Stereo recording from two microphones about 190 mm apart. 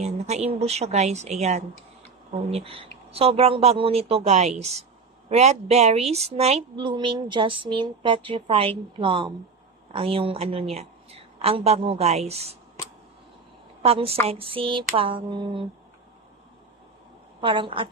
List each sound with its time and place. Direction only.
0.0 s a woman's voice: 35° right (ahead or behind)
13.8 s a woman's voice: 30° right (ahead or behind)
17.4 s speech: 25° right (ahead or behind)